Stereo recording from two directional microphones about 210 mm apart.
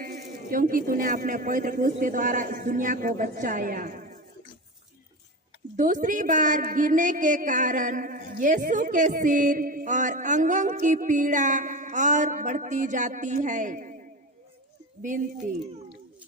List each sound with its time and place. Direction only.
0.0 s a woman's voice: 40° right (ahead or behind)
5.7 s a woman's voice: 40° right (ahead or behind)